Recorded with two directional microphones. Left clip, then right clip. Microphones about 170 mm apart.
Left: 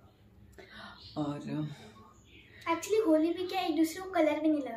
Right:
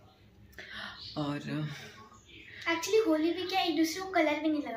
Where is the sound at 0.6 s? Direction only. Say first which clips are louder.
Right 6 dB; 5° left (ahead or behind).